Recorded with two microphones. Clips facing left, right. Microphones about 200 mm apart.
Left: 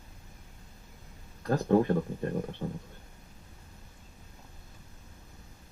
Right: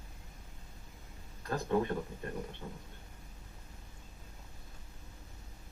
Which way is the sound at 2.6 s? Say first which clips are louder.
Left 9 dB; 45° left (ahead or behind).